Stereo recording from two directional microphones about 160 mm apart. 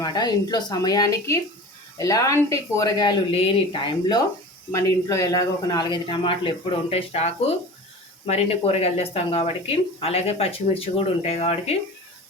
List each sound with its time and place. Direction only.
0.0 s a man's voice: 25° left (ahead or behind)
4.7 s a man's voice: 20° left (ahead or behind); by 11.8 s 40° left (ahead or behind)